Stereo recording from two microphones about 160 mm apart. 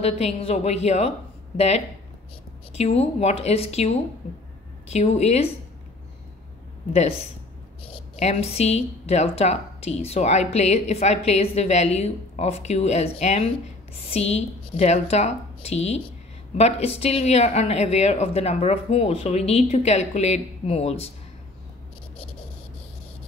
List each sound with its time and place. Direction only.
0.0 s a woman's voice: 40° left (ahead or behind)
2.7 s a woman's voice: 40° left (ahead or behind)
6.9 s a woman's voice: 45° left (ahead or behind)